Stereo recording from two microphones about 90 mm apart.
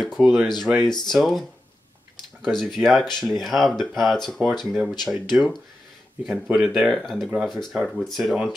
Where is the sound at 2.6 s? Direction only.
Centre (ahead or behind).